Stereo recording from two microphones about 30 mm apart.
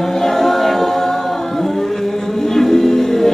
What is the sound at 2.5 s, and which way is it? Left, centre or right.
Music, centre.